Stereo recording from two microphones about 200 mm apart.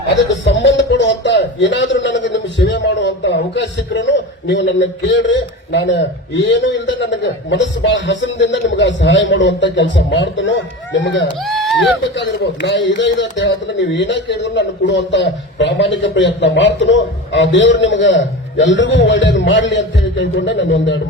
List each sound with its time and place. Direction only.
0.3 s a man's voice: 65° left (ahead or behind)
11.4 s speech: centre (ahead or behind)
12.1 s a man's voice: 60° left (ahead or behind)